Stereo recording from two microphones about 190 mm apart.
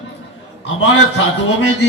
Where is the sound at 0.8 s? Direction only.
80° left.